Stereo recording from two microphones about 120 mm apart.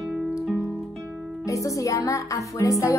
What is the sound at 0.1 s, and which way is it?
Music, centre (ahead or behind).